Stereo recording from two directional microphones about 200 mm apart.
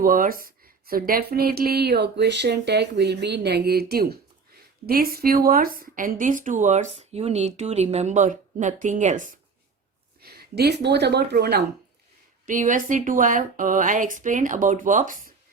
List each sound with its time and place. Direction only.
0.0 s a woman's voice: 45° right (ahead or behind)
10.2 s speech: 50° right (ahead or behind)
12.5 s a woman's voice: 40° right (ahead or behind)